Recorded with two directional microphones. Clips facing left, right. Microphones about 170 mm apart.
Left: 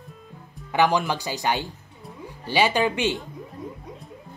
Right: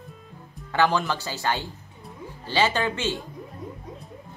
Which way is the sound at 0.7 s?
15° left (ahead or behind).